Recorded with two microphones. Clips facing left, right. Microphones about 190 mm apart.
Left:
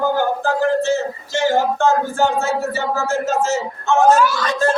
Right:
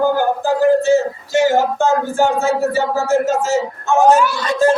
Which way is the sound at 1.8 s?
15° right (ahead or behind).